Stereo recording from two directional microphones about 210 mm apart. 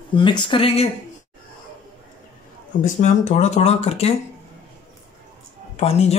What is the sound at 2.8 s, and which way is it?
Speech, 35° left (ahead or behind).